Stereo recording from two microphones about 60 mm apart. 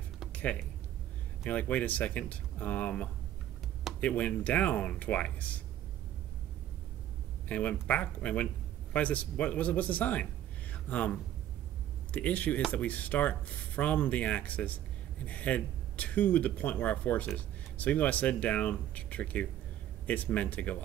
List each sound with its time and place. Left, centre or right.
0.3 s music: left
1.4 s speech: left
7.4 s speech: left
10.7 s a sound: left
12.1 s speech: left